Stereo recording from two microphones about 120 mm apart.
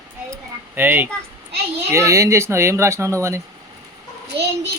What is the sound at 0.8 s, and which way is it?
Speech, 15° right (ahead or behind).